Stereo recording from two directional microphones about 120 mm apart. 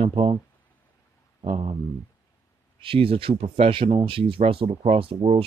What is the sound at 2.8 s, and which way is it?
Speech, 50° right (ahead or behind).